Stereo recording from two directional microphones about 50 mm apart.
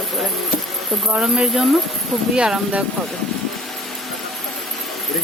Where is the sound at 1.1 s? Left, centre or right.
Centre.